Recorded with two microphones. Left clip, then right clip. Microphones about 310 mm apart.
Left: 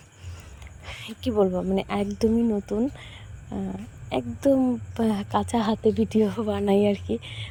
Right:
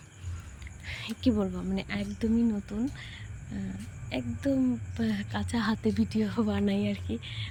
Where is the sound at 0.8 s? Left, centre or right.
Centre.